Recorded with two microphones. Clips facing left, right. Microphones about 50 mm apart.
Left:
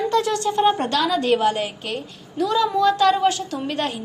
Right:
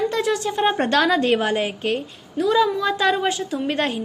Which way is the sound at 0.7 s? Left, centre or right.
Right.